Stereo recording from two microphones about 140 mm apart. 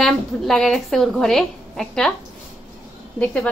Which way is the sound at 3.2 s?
10° left (ahead or behind).